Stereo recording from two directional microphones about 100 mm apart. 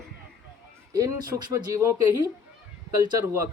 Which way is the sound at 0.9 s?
35° right (ahead or behind).